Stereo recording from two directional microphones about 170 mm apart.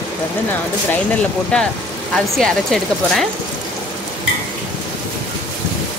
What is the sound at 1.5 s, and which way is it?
Speech, 5° left (ahead or behind).